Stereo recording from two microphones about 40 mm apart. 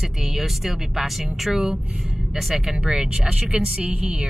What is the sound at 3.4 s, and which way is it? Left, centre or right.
Speech, right.